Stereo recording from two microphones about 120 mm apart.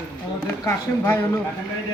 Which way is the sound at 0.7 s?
20° left (ahead or behind).